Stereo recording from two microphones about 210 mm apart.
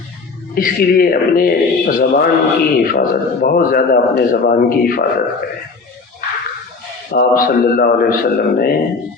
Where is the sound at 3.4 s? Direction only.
45° left (ahead or behind).